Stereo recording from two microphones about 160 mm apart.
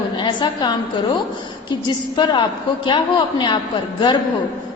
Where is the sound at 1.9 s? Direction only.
30° left (ahead or behind).